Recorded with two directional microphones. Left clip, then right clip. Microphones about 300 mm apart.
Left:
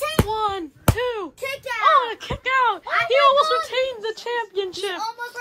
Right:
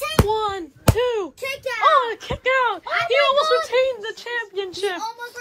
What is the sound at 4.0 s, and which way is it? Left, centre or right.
Speech, centre.